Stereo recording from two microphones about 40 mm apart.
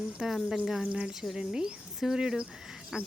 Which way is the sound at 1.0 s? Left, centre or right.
Centre.